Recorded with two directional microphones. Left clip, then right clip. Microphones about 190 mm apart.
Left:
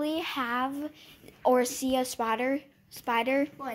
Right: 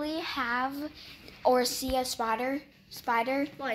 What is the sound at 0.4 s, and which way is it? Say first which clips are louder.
Speech: right 3 dB; 25° left (ahead or behind).